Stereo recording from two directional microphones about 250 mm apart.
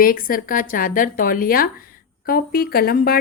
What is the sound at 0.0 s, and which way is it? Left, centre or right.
A woman's voice, left.